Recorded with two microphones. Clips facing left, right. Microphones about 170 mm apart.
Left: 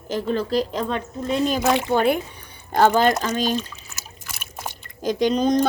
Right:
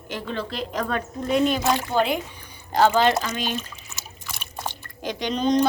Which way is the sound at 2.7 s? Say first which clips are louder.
Left 1 dB; 50° left (ahead or behind).